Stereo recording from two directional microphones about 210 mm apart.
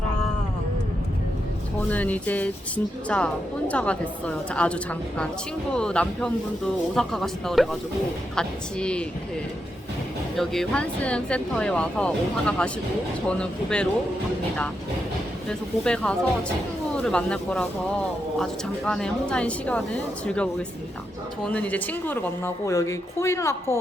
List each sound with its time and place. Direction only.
1.9 s speech: 5° left (ahead or behind)
10.3 s speech: centre (ahead or behind)
15.4 s speech: 5° left (ahead or behind)
18.9 s speech: 5° left (ahead or behind)